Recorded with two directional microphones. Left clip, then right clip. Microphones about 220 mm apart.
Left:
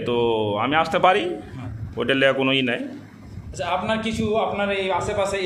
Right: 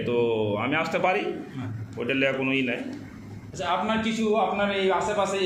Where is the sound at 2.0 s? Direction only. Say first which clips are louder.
Left 6 dB; 40° left (ahead or behind).